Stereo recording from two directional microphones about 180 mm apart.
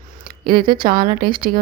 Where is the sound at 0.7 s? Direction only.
55° right (ahead or behind).